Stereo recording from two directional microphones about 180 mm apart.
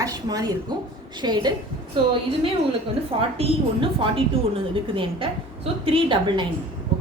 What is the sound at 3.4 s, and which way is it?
A woman's voice, 30° right (ahead or behind).